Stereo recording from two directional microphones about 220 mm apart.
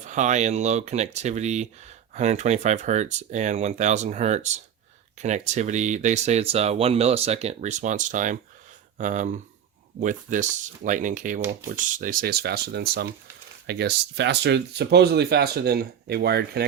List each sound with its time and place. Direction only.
0.1 s speech: 35° right (ahead or behind)